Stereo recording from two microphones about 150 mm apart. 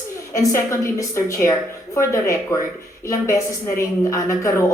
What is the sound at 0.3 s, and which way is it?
A woman's voice, 20° left (ahead or behind).